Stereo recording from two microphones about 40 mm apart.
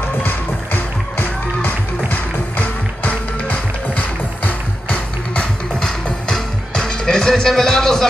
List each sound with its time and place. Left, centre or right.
0.2 s music: left; by 8.1 s centre